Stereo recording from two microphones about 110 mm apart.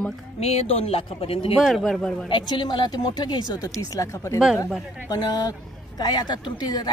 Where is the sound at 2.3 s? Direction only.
50° left (ahead or behind).